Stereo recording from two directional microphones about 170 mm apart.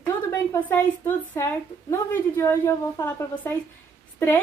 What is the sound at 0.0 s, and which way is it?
A woman's voice, 10° left (ahead or behind).